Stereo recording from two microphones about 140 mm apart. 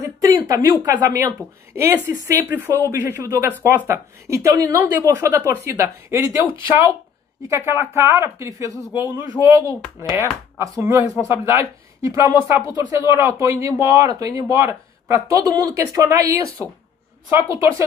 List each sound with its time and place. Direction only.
0.0 s a sound: 25° right (ahead or behind)
0.8 s speech: 25° right (ahead or behind)
7.4 s a woman's voice: 20° right (ahead or behind)